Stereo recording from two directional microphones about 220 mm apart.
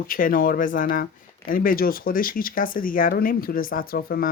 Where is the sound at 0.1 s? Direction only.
40° left (ahead or behind).